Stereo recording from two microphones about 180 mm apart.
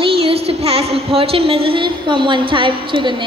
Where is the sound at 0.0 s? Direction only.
30° right (ahead or behind).